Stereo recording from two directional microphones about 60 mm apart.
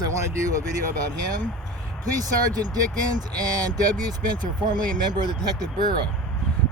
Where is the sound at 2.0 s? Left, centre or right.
Right.